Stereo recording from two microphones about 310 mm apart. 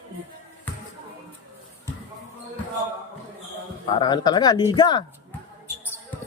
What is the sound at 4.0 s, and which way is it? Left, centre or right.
Speech, centre.